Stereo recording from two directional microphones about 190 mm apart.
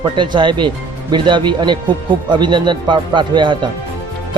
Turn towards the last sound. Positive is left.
turn(degrees=-25)  # may be behind; listen again after turning